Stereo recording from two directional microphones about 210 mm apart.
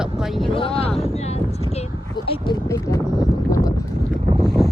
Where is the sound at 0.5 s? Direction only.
25° left (ahead or behind).